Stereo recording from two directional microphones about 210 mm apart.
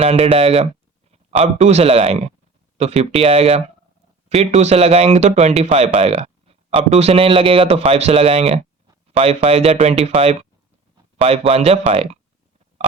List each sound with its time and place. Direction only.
0.0 s a man's voice: 25° right (ahead or behind)